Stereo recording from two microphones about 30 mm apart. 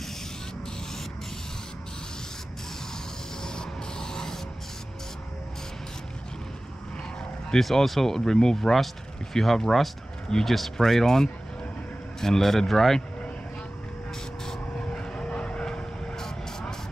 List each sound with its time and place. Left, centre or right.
3.4 s spray: left
7.5 s speech: centre
8.5 s speech: centre
14.8 s vehicle: left
15.6 s vehicle: left